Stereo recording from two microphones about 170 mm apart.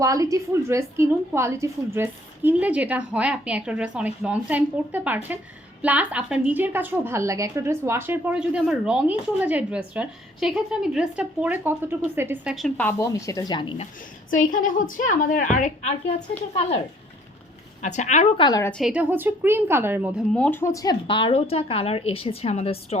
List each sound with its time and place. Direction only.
0.0 s a woman's voice: 20° right (ahead or behind)
12.5 s a woman's voice: 5° left (ahead or behind); by 13.8 s 30° left (ahead or behind)
14.3 s a woman's voice: 50° left (ahead or behind)
17.8 s a woman's voice: 45° left (ahead or behind)
18.3 s a woman's voice: 25° left (ahead or behind)
18.7 s a woman's voice: 5° right (ahead or behind)
20.3 s speech: 10° left (ahead or behind); by 23.0 s 35° left (ahead or behind)